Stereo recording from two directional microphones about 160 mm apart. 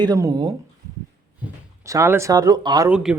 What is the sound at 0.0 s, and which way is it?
Speech, 25° right (ahead or behind).